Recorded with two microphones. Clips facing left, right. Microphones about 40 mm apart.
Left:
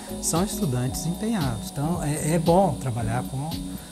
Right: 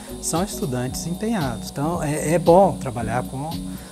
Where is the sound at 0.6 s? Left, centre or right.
Right.